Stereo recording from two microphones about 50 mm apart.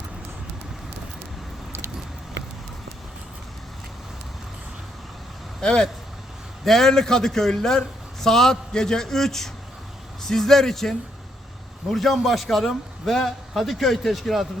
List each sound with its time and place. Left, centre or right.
5.6 s a man's voice: centre